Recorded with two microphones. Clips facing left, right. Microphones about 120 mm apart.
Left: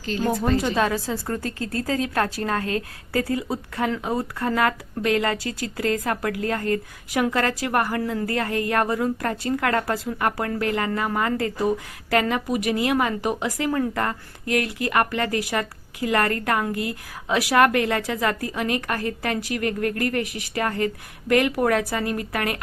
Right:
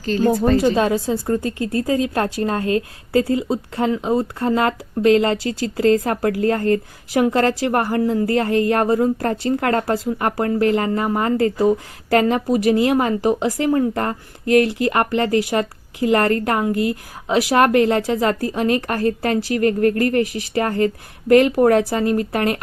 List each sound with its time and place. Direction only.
0.0 s a woman's voice: 40° right (ahead or behind)